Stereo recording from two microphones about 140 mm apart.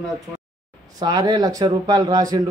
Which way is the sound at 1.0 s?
25° right (ahead or behind).